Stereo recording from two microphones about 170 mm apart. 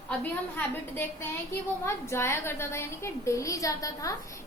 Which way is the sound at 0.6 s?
10° left (ahead or behind).